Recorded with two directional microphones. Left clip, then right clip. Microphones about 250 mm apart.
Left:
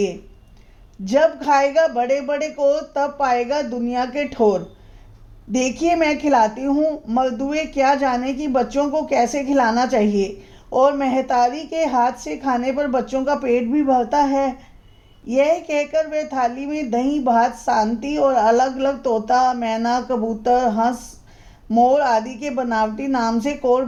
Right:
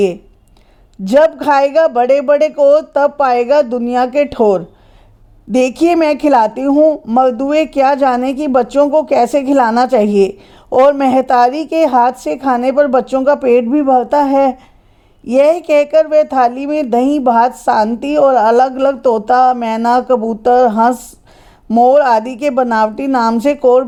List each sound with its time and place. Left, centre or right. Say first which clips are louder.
1.0 s a man's voice: right 7 dB; right